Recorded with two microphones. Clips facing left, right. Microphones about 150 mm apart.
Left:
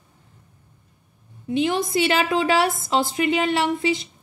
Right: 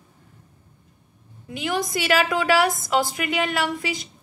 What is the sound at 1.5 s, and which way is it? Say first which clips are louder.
A woman's voice: left 4 dB; 25° left (ahead or behind).